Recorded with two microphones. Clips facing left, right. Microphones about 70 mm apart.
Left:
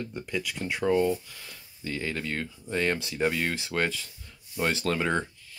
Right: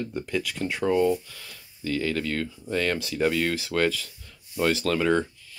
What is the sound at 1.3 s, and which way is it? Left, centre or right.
Speech, left.